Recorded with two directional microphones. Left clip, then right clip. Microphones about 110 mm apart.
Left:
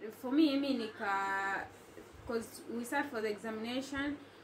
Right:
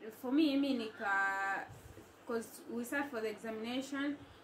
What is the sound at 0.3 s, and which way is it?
A woman's voice, 25° right (ahead or behind).